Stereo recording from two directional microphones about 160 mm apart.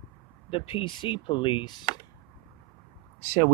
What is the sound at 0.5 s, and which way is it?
Speech, 35° left (ahead or behind).